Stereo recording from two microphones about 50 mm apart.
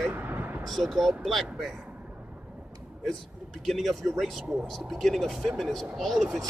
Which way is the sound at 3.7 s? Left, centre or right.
Centre.